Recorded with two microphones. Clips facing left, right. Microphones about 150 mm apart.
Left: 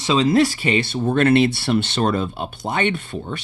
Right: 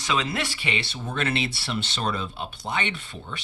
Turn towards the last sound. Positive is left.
turn(degrees=50)  # may be behind; listen again after turning